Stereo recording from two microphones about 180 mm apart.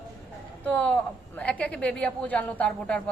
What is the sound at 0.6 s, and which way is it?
A woman's voice, 5° left (ahead or behind).